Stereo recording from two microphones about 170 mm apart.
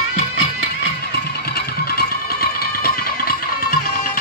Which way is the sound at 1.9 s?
65° left (ahead or behind).